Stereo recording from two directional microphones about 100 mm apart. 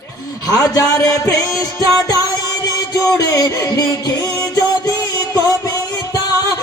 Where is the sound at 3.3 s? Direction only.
30° left (ahead or behind).